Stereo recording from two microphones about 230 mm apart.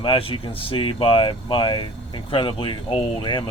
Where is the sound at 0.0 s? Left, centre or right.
Left.